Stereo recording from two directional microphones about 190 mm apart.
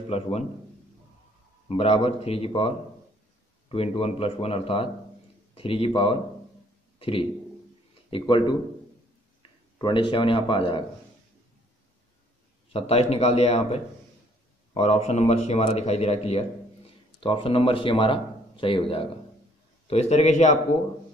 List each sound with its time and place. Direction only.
0.1 s a man's voice: 35° left (ahead or behind)
1.7 s a man's voice: 30° left (ahead or behind)
12.6 s a man's voice: 30° left (ahead or behind)